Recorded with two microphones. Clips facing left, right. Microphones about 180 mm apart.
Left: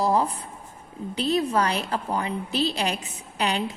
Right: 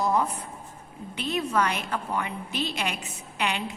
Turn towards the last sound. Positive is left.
turn(degrees=35)  # may be behind; listen again after turning